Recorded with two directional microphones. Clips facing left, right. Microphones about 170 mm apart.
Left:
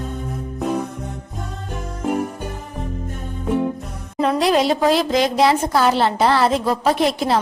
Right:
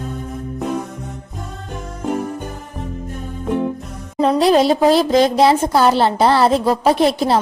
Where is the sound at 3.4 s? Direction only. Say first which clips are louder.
Even; centre (ahead or behind).